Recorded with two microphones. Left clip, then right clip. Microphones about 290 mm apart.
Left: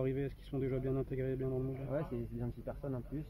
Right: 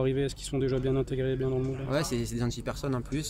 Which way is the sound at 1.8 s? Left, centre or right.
Right.